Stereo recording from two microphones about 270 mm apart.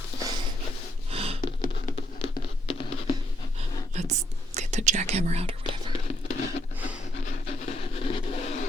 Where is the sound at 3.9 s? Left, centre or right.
Right.